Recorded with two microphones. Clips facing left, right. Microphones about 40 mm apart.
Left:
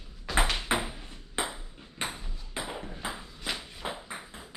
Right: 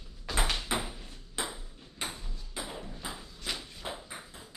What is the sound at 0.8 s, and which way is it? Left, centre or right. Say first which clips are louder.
Ping: left 3 dB; left.